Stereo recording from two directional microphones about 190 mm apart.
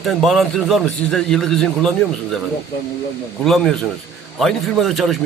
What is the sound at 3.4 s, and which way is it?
A man's voice, centre (ahead or behind).